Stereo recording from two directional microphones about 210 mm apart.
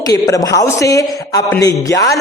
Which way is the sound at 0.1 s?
15° left (ahead or behind).